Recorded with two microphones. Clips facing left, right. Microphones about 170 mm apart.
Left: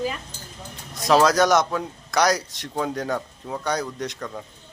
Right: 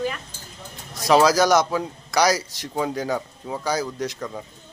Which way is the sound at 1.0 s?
Centre (ahead or behind).